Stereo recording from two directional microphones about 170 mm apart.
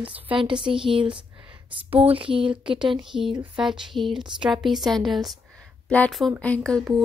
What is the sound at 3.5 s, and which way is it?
A woman's voice, 5° right (ahead or behind).